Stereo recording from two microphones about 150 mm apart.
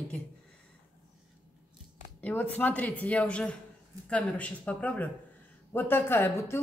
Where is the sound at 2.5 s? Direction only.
10° left (ahead or behind).